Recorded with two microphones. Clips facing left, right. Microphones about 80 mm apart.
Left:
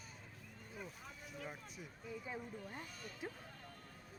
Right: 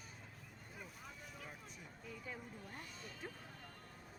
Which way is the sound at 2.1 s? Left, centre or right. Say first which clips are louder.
Left 4 dB; centre.